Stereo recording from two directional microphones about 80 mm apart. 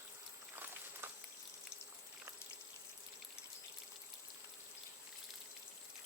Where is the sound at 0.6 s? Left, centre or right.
Right.